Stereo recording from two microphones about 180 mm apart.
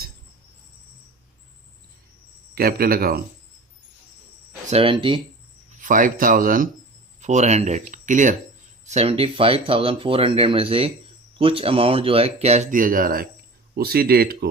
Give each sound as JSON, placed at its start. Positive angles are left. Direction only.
{"t": 2.6, "sound": "speech", "side_deg": -55}
{"t": 4.7, "sound": "speech", "side_deg": -30}
{"t": 5.8, "sound": "speech", "side_deg": -50}
{"t": 7.2, "sound": "speech", "side_deg": -40}